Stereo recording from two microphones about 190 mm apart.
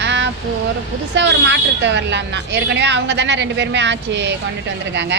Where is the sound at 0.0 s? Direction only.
70° right (ahead or behind).